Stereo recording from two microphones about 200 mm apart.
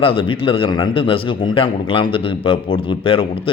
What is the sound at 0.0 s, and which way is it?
Speech, 25° left (ahead or behind).